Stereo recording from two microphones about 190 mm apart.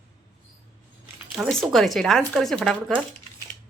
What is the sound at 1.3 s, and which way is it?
Speech, centre (ahead or behind).